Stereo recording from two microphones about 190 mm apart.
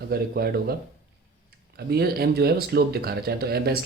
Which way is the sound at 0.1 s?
55° right (ahead or behind).